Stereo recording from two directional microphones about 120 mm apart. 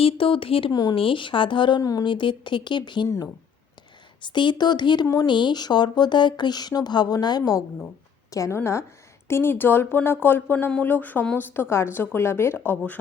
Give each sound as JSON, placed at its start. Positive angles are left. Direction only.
{"t": 0.0, "sound": "speech", "side_deg": 50}
{"t": 0.7, "sound": "speech", "side_deg": 35}
{"t": 0.9, "sound": "speech", "side_deg": 45}
{"t": 1.8, "sound": "speech", "side_deg": 30}
{"t": 2.0, "sound": "speech", "side_deg": 45}
{"t": 4.2, "sound": "a woman's voice", "side_deg": 40}